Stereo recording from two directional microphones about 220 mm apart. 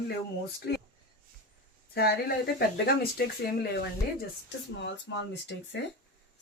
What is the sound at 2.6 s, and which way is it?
Speech, 45° left (ahead or behind).